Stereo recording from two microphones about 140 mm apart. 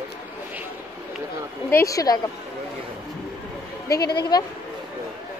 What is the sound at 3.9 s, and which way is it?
Speech, 30° left (ahead or behind).